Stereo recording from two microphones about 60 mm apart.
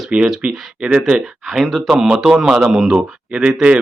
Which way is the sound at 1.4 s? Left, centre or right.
Centre.